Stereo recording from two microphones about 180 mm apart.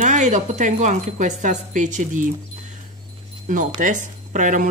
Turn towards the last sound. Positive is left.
turn(degrees=-45)  # may be behind; listen again after turning